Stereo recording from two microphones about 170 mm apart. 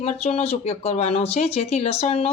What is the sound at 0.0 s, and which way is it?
Speech, 40° left (ahead or behind).